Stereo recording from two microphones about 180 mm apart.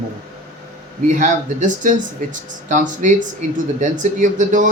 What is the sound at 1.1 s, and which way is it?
Speech, 45° right (ahead or behind).